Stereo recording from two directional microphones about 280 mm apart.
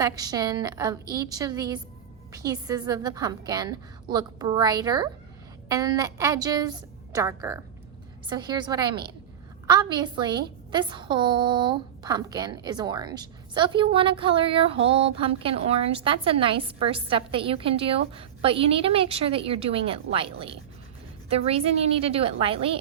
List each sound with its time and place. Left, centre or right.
0.0 s a woman's voice: centre